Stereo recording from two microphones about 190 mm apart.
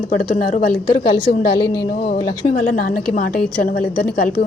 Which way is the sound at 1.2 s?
55° left (ahead or behind).